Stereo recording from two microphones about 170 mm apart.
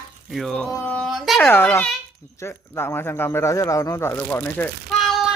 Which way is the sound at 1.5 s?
10° left (ahead or behind).